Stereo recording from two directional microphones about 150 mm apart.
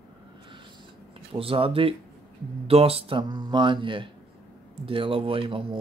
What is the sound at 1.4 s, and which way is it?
Speech, 35° right (ahead or behind).